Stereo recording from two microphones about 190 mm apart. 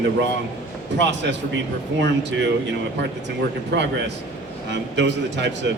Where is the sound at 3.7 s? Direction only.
65° right (ahead or behind).